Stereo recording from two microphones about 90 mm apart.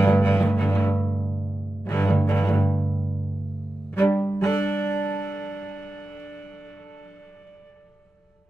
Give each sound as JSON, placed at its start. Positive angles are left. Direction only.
{"t": 0.0, "sound": "music", "side_deg": 20}
{"t": 0.4, "sound": "music", "side_deg": 5}
{"t": 1.8, "sound": "music", "side_deg": 30}
{"t": 2.3, "sound": "music", "side_deg": 5}
{"t": 4.3, "sound": "music", "side_deg": 30}